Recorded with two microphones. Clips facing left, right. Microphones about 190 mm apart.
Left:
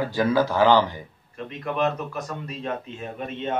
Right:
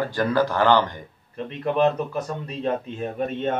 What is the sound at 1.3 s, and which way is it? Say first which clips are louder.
Speech: right 4 dB; 35° right (ahead or behind).